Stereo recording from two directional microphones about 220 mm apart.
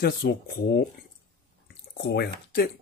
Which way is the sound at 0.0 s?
45° left (ahead or behind).